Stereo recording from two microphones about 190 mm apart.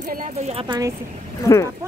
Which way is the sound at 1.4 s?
15° left (ahead or behind).